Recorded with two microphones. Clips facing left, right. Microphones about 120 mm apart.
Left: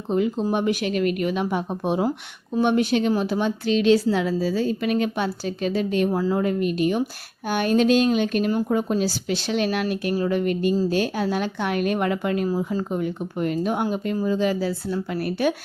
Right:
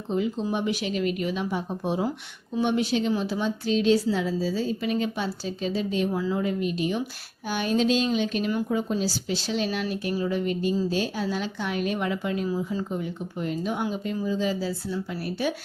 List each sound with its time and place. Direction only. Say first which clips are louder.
0.1 s speech: left 4 dB; 60° left (ahead or behind)
6.1 s speech: left 4 dB; 45° left (ahead or behind)
8.9 s speech: left 4 dB; 60° left (ahead or behind)